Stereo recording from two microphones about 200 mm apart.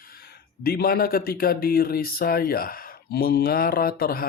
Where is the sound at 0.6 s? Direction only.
50° left (ahead or behind).